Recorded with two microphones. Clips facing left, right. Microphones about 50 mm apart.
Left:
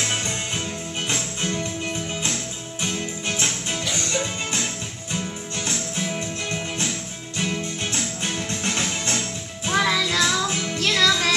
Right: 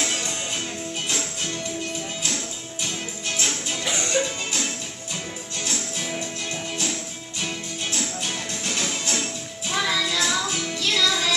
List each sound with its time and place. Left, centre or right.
1.0 s music: left
2.8 s music: left
3.8 s music: centre
7.9 s music: left
9.7 s music: left